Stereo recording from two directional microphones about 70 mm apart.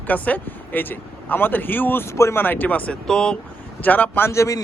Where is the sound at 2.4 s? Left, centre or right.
Left.